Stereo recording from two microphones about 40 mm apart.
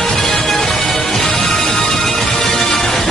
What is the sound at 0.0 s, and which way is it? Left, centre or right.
Music, centre.